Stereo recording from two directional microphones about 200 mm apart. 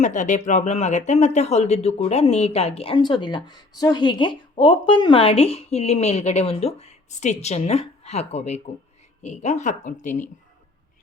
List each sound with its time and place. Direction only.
0.0 s speech: 40° left (ahead or behind)